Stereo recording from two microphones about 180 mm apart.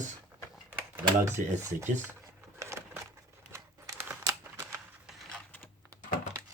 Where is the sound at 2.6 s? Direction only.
15° right (ahead or behind).